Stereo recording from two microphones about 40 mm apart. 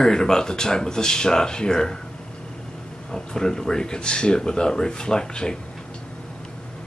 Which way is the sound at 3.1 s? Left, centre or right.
Centre.